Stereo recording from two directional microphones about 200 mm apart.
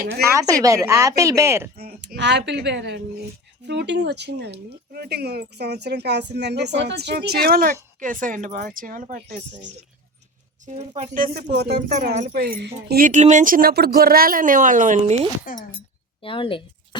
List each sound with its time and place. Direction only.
0.3 s speech: 15° right (ahead or behind)
1.8 s speech: 55° right (ahead or behind)
10.7 s speech: 35° right (ahead or behind)
16.2 s speech: 25° left (ahead or behind)